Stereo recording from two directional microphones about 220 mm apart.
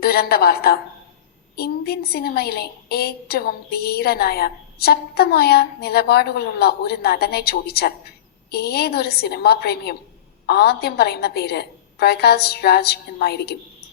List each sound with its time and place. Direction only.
0.0 s a woman's voice: 45° left (ahead or behind)